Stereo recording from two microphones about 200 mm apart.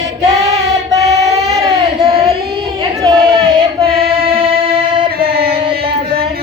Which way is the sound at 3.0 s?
20° right (ahead or behind).